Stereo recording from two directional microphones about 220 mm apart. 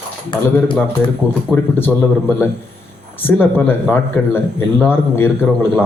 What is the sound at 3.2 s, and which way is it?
A man's voice, 10° left (ahead or behind).